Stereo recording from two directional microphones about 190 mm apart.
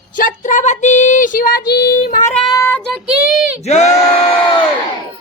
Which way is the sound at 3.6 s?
35° left (ahead or behind).